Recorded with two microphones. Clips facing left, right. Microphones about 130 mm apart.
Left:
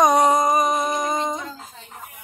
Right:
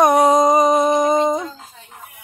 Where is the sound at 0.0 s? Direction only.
10° right (ahead or behind).